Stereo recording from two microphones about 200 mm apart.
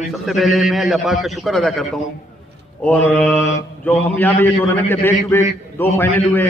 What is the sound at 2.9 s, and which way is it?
A man's voice, 5° left (ahead or behind).